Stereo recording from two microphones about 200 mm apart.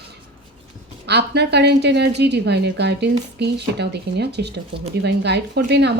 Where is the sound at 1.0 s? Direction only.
55° right (ahead or behind).